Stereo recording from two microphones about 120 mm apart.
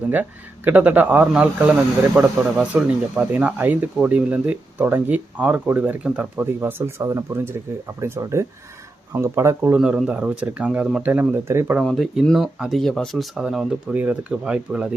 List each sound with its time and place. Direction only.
0.1 s speech: 15° right (ahead or behind)
9.7 s speech: 5° right (ahead or behind)
11.8 s speech: centre (ahead or behind)